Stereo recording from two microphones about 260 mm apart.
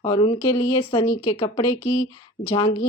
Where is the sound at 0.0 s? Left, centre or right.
Centre.